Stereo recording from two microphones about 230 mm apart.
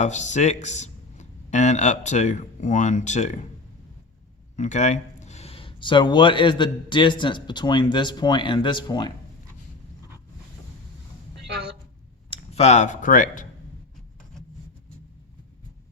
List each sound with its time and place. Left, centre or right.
0.0 s speech: left
4.5 s speech: left
11.4 s a sound: right
12.4 s speech: left